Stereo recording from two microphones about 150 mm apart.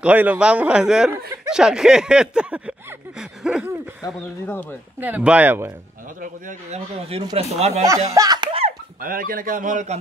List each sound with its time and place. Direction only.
0.0 s speech: 10° right (ahead or behind)
4.0 s speech: 25° left (ahead or behind)
5.0 s speech: 10° right (ahead or behind)
6.2 s a man's voice: 60° right (ahead or behind)
7.3 s speech: 45° right (ahead or behind)
7.8 s speech: 20° right (ahead or behind)
8.5 s speech: 40° right (ahead or behind)
9.0 s a man's voice: 70° right (ahead or behind)